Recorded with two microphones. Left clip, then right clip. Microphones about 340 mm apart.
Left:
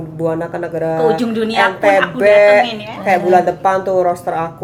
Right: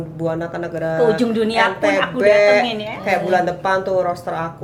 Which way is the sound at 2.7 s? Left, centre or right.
Right.